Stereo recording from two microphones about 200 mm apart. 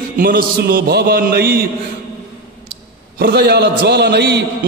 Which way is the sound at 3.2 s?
55° right (ahead or behind).